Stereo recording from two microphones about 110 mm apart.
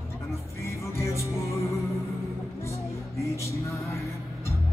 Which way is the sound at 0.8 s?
25° left (ahead or behind).